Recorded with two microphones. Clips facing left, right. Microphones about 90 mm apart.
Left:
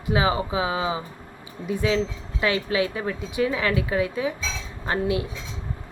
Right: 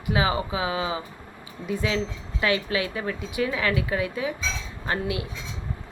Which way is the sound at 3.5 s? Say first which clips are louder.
Left 2 dB; 10° left (ahead or behind).